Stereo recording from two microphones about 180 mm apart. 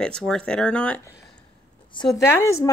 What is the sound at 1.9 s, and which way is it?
Speech, 20° left (ahead or behind).